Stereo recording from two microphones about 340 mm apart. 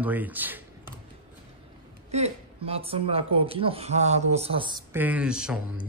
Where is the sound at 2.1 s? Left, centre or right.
Centre.